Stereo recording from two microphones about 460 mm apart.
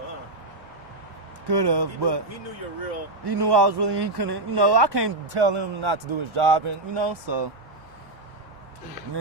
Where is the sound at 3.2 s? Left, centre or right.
Right.